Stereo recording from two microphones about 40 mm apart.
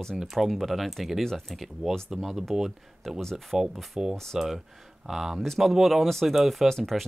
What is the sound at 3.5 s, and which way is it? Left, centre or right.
Speech, centre.